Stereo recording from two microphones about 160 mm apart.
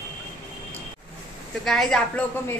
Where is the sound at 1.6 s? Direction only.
5° left (ahead or behind).